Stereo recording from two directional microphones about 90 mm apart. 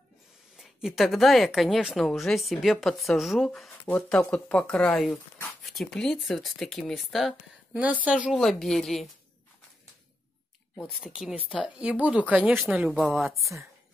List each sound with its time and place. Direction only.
0.6 s speech: 5° right (ahead or behind)
7.7 s speech: 15° right (ahead or behind)
8.3 s speech: 5° left (ahead or behind)
11.1 s speech: 5° right (ahead or behind)
11.8 s speech: 15° right (ahead or behind)